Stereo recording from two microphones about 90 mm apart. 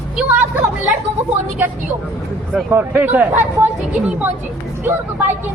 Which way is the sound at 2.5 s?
20° right (ahead or behind).